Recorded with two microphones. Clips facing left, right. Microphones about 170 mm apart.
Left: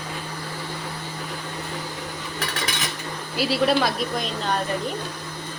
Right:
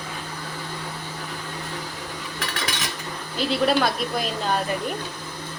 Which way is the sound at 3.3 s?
Centre (ahead or behind).